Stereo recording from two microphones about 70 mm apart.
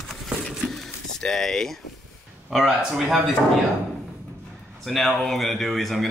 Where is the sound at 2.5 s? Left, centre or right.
Centre.